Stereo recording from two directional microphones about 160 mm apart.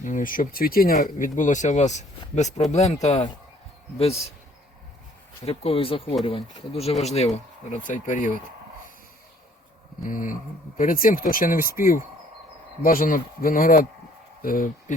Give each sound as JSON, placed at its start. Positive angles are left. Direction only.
{"t": 0.0, "sound": "speech", "side_deg": 55}
{"t": 5.5, "sound": "speech", "side_deg": 35}
{"t": 10.0, "sound": "speech", "side_deg": 55}
{"t": 12.8, "sound": "speech", "side_deg": 60}